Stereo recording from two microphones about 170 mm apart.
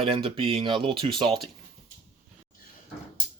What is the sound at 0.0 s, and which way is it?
Speech, 35° right (ahead or behind).